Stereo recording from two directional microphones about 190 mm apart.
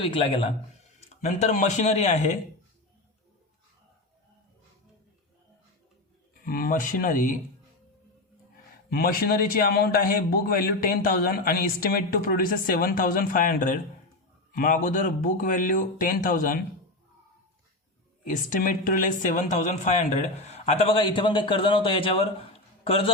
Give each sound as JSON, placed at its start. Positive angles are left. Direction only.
{"t": 0.0, "sound": "a man's voice", "side_deg": 30}
{"t": 6.3, "sound": "speech", "side_deg": 50}
{"t": 8.9, "sound": "speech", "side_deg": 50}
{"t": 18.3, "sound": "speech", "side_deg": 45}